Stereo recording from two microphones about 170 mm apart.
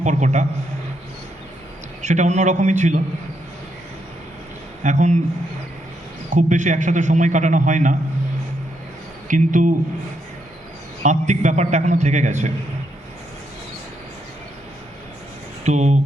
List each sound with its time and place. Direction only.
0.0 s a man's voice: 45° right (ahead or behind)
2.0 s a man's voice: 45° right (ahead or behind)
4.8 s a man's voice: 45° right (ahead or behind)
6.3 s a man's voice: 45° right (ahead or behind)
9.2 s a man's voice: 50° right (ahead or behind)
11.0 s a man's voice: 45° right (ahead or behind)
15.6 s a man's voice: 45° right (ahead or behind)